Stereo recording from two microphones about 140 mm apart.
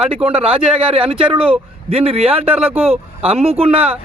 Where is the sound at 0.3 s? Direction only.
45° right (ahead or behind).